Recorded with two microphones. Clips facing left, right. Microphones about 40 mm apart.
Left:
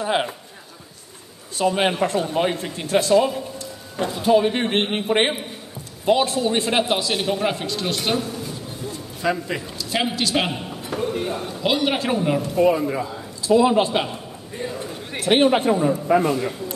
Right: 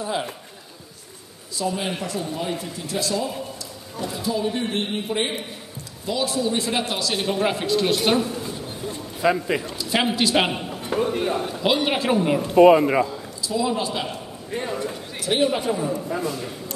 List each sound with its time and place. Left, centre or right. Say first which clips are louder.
0.0 s a man's voice: left 5 dB; left
1.5 s speech: left 6 dB; left
6.0 s a man's voice: left 5 dB; left
6.8 s a man's voice: left 4 dB; left
7.2 s a man's voice: right 1 dB; centre
9.2 s a man's voice: right 3 dB; centre
10.9 s a sound: right 3 dB; centre
11.3 s a man's voice: right 1 dB; centre
12.5 s a man's voice: right 7 dB; right
13.4 s a man's voice: left 8 dB; left
15.1 s a man's voice: left 5 dB; left